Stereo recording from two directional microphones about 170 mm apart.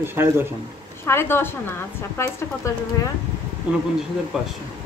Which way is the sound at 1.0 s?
15° left (ahead or behind).